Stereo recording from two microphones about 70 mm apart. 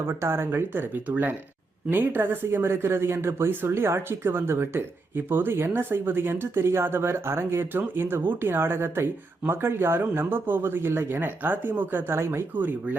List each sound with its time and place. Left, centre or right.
0.0 s speech: right